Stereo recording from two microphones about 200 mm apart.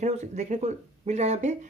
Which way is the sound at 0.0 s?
35° right (ahead or behind).